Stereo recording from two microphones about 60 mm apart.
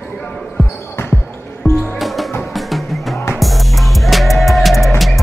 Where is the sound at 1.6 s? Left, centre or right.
Centre.